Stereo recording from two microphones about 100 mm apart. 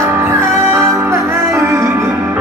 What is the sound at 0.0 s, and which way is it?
Music, 25° right (ahead or behind).